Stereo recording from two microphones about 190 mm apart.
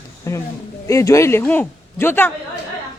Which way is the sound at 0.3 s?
15° left (ahead or behind).